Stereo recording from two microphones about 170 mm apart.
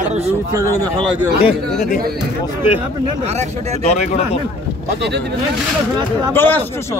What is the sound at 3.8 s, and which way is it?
Speech, 40° left (ahead or behind).